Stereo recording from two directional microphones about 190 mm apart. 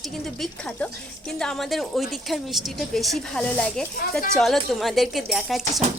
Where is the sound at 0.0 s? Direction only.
Centre (ahead or behind).